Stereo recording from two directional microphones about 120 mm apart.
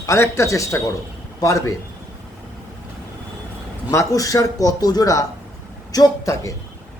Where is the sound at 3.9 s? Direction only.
25° left (ahead or behind).